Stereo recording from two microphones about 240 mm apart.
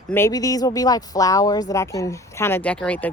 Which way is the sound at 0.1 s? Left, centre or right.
Centre.